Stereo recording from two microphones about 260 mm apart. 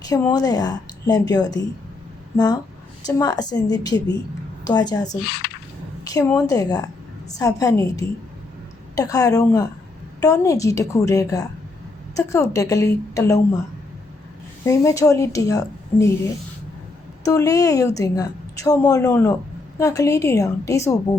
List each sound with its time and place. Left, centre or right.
0.0 s a woman's voice: centre
3.0 s a woman's voice: centre
5.0 s speech: left
6.1 s a woman's voice: centre
14.7 s a woman's voice: centre
17.2 s a woman's voice: centre